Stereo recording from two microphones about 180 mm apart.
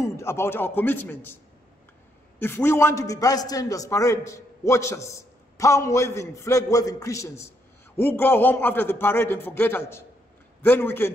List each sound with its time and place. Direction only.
0.0 s a man's voice: 15° left (ahead or behind)
2.3 s a man's voice: 10° left (ahead or behind)